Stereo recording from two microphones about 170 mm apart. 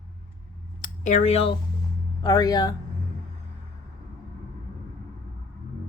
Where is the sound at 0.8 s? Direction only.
50° left (ahead or behind).